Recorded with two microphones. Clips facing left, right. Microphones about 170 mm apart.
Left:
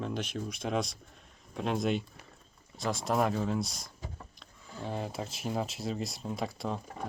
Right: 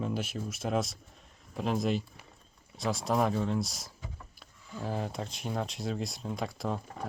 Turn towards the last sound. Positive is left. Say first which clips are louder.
# right 1 dB
turn(degrees=0)  # may be behind; listen again after turning